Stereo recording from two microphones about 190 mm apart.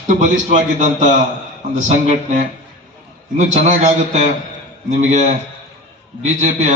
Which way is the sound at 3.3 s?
40° right (ahead or behind).